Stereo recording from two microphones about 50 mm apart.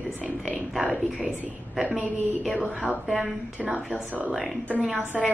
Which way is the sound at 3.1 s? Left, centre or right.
Centre.